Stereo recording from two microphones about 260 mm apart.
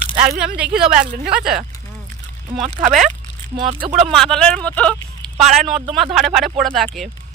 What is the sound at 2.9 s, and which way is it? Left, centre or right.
Speech, right.